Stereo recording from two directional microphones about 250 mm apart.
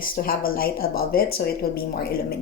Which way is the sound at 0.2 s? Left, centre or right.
Left.